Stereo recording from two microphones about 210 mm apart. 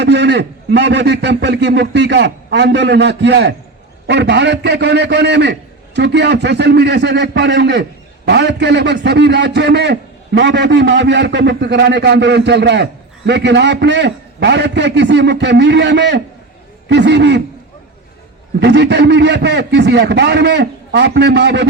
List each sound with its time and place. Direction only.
0.0 s a man's voice: 55° right (ahead or behind)
18.6 s a man's voice: 55° right (ahead or behind)